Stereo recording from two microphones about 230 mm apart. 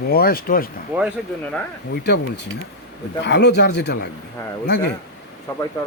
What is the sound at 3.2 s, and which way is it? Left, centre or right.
Speech, left.